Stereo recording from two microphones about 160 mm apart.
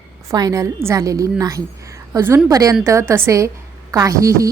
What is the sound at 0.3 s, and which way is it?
A woman's voice, 20° right (ahead or behind).